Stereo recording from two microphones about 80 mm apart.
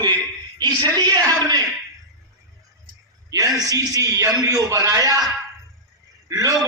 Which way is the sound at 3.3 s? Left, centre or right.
Right.